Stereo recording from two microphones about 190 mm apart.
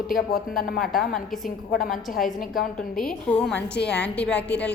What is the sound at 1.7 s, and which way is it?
Speech, 50° left (ahead or behind).